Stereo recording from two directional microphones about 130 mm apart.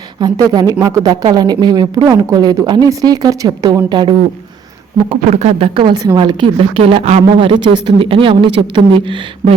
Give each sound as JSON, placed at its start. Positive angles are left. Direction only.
{"t": 0.2, "sound": "speech", "side_deg": -30}
{"t": 5.0, "sound": "speech", "side_deg": -55}
{"t": 5.7, "sound": "a woman's voice", "side_deg": -35}